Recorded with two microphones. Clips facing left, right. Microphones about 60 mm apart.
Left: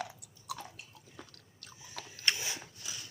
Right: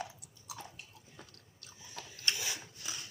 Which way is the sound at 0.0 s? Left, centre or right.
Left.